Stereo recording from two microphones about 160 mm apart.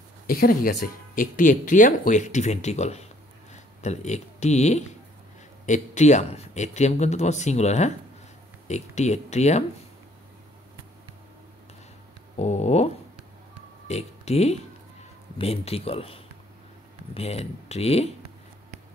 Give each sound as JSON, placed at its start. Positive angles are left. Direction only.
{"t": 0.3, "sound": "speech", "side_deg": 65}
{"t": 12.4, "sound": "speech", "side_deg": 40}